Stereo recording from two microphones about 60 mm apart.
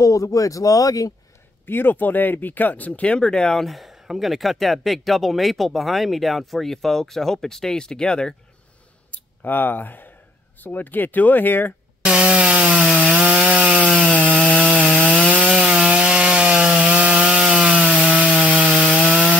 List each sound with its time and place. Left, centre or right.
0.0 s speech: left
1.7 s speech: left; by 8.4 s centre
9.1 s speech: left
12.0 s wood: centre
13.9 s wood: centre
15.4 s wood: centre